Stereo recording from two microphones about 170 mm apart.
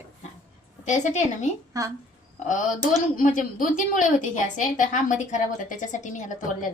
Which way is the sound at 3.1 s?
50° left (ahead or behind).